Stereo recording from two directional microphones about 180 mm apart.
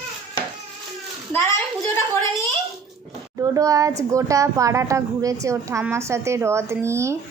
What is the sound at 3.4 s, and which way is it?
A woman's voice, 20° right (ahead or behind).